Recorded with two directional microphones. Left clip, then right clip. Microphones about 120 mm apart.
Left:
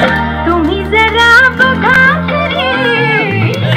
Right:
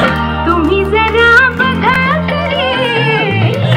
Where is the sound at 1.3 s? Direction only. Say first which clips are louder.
Left 2 dB; 10° right (ahead or behind).